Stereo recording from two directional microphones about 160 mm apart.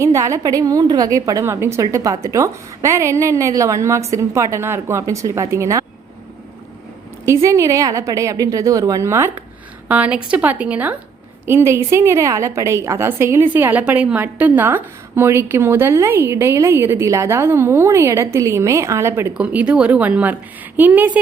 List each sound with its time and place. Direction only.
0.0 s a woman's voice: 20° right (ahead or behind)
7.3 s a woman's voice: 20° right (ahead or behind)